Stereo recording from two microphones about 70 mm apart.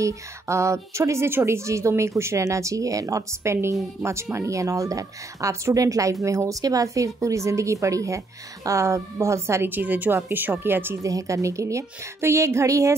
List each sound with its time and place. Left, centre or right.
0.0 s a woman's voice: right
9.7 s a woman's voice: right
11.0 s a woman's voice: right